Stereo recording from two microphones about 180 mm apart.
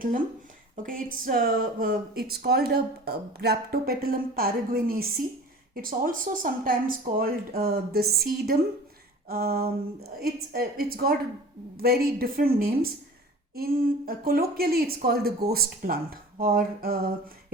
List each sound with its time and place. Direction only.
0.8 s speech: 50° right (ahead or behind)
9.2 s speech: 55° right (ahead or behind)